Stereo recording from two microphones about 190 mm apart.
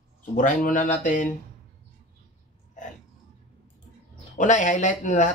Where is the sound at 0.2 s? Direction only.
40° left (ahead or behind).